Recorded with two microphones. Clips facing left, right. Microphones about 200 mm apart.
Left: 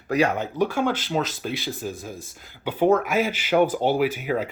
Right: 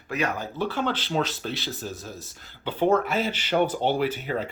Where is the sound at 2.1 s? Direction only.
50° left (ahead or behind).